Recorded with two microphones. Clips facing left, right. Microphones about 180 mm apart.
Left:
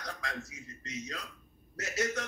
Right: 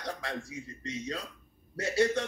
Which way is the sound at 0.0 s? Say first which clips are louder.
Right 4 dB; 30° right (ahead or behind).